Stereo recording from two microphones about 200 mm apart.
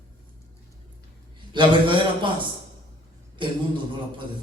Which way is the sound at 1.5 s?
25° right (ahead or behind).